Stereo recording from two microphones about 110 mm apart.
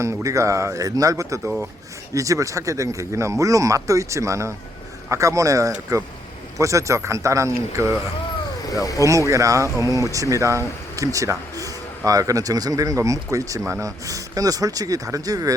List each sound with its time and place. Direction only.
0.0 s speech: 30° right (ahead or behind)
8.6 s speech: 35° left (ahead or behind)
9.0 s speech: 30° right (ahead or behind)
9.6 s speech: 25° left (ahead or behind)
9.9 s speech: 30° right (ahead or behind)